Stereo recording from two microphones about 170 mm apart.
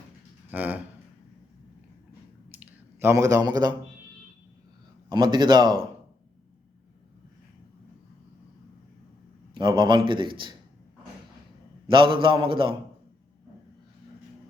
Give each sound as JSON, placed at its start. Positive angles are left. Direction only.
{"t": 0.5, "sound": "speech", "side_deg": -10}
{"t": 2.6, "sound": "a sound", "side_deg": -15}
{"t": 5.1, "sound": "a man's voice", "side_deg": -25}
{"t": 9.6, "sound": "a man's voice", "side_deg": -25}
{"t": 11.9, "sound": "a man's voice", "side_deg": -30}